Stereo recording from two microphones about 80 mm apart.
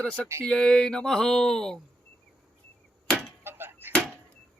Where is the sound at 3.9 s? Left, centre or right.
Centre.